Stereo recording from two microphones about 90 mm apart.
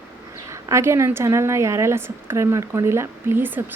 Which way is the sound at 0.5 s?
30° right (ahead or behind).